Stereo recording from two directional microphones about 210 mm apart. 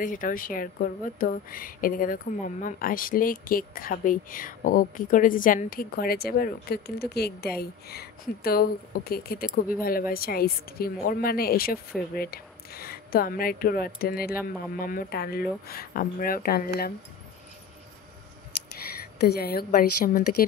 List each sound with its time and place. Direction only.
0.0 s speech: 40° left (ahead or behind)
19.1 s speech: 50° left (ahead or behind)